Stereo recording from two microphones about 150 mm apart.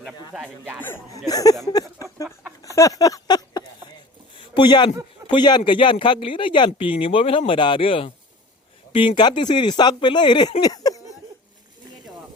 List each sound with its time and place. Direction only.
0.3 s speech: 5° right (ahead or behind)
1.3 s speech: 25° left (ahead or behind)
2.7 s a sound: 20° left (ahead or behind)
4.5 s speech: 30° left (ahead or behind)